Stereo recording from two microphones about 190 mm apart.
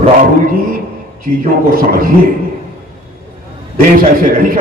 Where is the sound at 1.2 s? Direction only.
50° right (ahead or behind).